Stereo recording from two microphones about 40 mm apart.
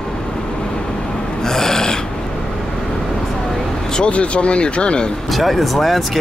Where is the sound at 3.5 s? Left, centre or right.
Centre.